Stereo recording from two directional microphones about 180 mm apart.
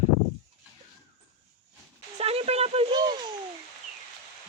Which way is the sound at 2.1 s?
35° right (ahead or behind).